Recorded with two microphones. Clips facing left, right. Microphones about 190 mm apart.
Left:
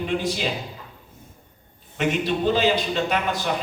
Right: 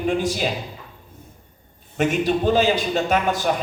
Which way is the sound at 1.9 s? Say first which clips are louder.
Right 3 dB; 45° right (ahead or behind).